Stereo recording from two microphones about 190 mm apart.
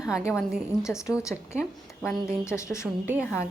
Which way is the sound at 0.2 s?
15° left (ahead or behind).